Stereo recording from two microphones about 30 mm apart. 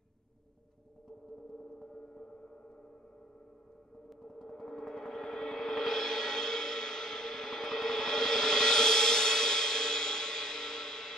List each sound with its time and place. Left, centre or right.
4.3 s music: centre